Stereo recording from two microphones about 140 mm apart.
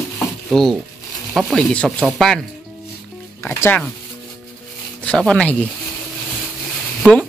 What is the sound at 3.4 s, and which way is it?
Speech, 15° left (ahead or behind).